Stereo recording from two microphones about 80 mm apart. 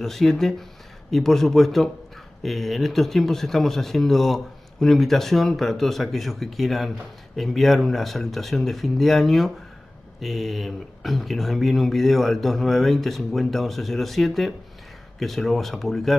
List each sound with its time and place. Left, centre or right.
0.0 s speech: centre